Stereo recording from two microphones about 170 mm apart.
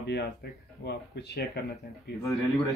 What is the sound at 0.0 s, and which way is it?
Speech, 75° left (ahead or behind).